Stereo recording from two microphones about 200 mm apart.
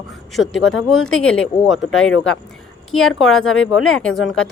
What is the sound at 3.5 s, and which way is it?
Speech, 90° left.